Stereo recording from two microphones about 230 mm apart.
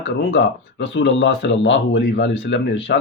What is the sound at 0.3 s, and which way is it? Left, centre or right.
Speech, left.